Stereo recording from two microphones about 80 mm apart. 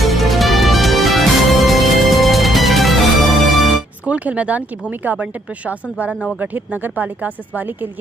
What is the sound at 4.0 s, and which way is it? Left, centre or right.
Speech, centre.